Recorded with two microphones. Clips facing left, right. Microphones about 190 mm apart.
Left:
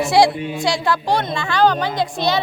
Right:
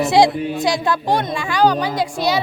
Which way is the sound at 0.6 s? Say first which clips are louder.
Left 1 dB; 20° right (ahead or behind).